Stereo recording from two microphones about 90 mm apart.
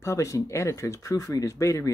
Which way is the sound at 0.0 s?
35° left (ahead or behind).